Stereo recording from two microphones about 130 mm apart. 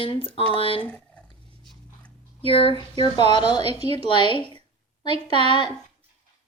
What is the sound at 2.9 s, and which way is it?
Speech, 35° left (ahead or behind).